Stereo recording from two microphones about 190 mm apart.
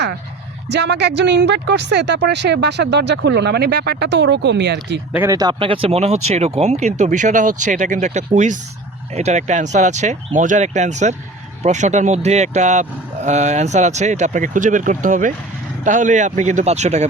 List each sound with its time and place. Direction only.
0.7 s speech: 65° right (ahead or behind)
5.1 s speech: 15° right (ahead or behind); by 17.1 s 35° right (ahead or behind)